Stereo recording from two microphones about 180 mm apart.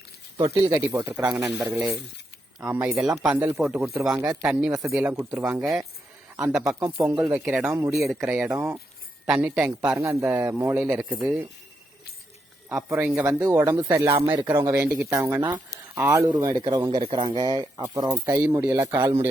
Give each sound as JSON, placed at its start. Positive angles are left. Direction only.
{"t": 0.3, "sound": "speech", "side_deg": -25}
{"t": 0.8, "sound": "speech", "side_deg": -10}
{"t": 4.9, "sound": "a man's voice", "side_deg": -5}
{"t": 12.7, "sound": "speech", "side_deg": -5}